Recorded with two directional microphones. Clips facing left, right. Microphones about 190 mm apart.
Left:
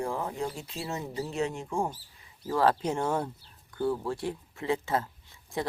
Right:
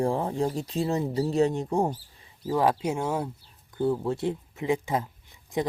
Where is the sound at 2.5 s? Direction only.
15° right (ahead or behind).